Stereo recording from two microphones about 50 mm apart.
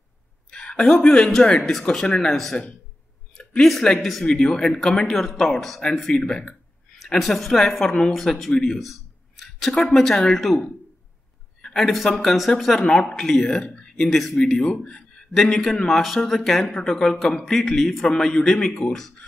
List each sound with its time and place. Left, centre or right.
0.5 s a woman's voice: centre
4.3 s a woman's voice: centre
8.7 s a sound: centre
9.9 s a woman's voice: centre
11.6 s a woman's voice: centre
13.5 s speech: left
14.0 s a woman's voice: centre
18.1 s a woman's voice: centre